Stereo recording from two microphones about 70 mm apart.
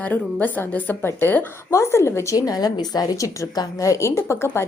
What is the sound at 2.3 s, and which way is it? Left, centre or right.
A woman's voice, left.